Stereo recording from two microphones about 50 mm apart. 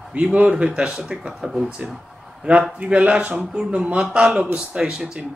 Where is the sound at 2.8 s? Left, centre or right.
Right.